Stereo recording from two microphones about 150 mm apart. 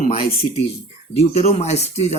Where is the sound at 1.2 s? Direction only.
45° left (ahead or behind).